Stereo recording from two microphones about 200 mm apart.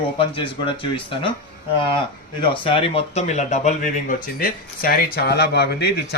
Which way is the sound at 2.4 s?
25° left (ahead or behind).